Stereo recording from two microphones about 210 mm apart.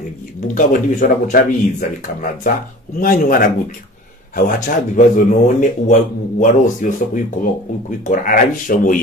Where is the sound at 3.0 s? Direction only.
40° left (ahead or behind).